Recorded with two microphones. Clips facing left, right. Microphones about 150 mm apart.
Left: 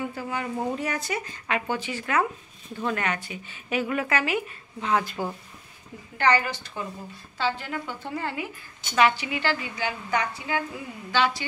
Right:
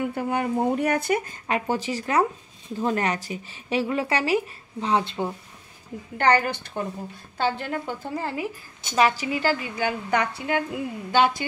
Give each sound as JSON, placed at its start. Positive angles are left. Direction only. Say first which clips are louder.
{"t": 0.1, "sound": "speech", "louder": "right 6 dB", "side_deg": -60}
{"t": 1.5, "sound": "a woman's voice", "louder": "right 3 dB", "side_deg": -40}
{"t": 6.1, "sound": "a woman's voice", "louder": "right 2 dB", "side_deg": -50}
{"t": 10.3, "sound": "a woman's voice", "louder": "right 4 dB", "side_deg": -60}